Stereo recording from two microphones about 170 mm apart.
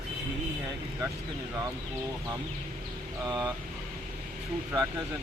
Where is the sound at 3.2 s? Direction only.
25° right (ahead or behind).